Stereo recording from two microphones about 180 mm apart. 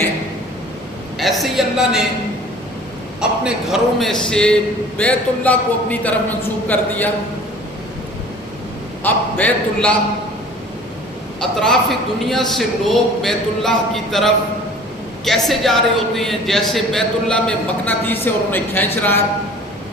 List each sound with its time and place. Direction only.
1.2 s speech: centre (ahead or behind)
3.2 s a man's voice: 5° right (ahead or behind)
9.0 s a man's voice: 10° left (ahead or behind)
11.3 s speech: 5° left (ahead or behind)